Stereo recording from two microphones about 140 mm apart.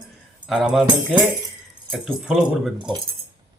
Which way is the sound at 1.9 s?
5° right (ahead or behind).